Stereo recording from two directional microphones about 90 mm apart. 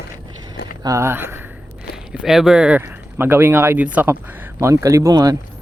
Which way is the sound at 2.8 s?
25° right (ahead or behind).